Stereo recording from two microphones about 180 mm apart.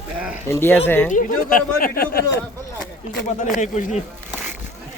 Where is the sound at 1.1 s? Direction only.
50° left (ahead or behind).